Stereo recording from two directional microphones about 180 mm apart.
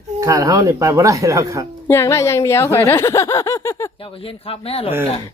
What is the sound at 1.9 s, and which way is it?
A woman's voice, 15° left (ahead or behind).